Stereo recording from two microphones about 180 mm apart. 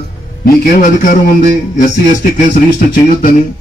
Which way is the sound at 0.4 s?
45° left (ahead or behind).